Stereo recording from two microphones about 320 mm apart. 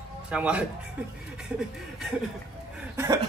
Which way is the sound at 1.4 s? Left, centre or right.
Centre.